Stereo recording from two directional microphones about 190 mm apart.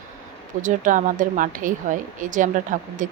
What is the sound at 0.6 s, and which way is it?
Speech, 45° right (ahead or behind).